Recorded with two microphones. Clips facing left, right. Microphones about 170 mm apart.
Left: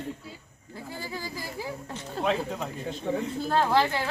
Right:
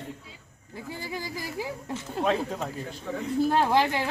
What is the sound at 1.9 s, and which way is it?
Speech, 5° right (ahead or behind).